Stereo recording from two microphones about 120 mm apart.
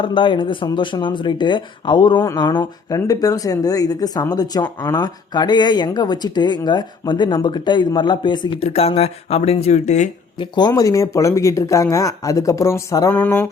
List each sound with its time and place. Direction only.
0.0 s speech: 45° left (ahead or behind)
8.6 s speech: 55° left (ahead or behind); by 10.1 s 75° left (ahead or behind)
10.3 s speech: 40° left (ahead or behind); by 13.1 s 25° left (ahead or behind)
13.1 s a sound: 15° left (ahead or behind)